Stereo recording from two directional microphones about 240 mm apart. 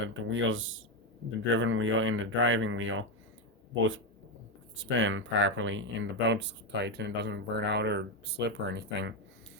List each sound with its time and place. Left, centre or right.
0.0 s speech: right
4.8 s speech: right